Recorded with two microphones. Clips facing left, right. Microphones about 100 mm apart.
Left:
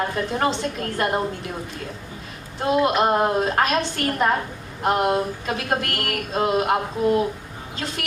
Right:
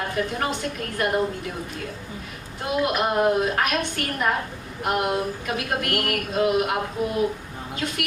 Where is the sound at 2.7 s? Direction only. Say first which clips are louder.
Left 5 dB; 25° left (ahead or behind).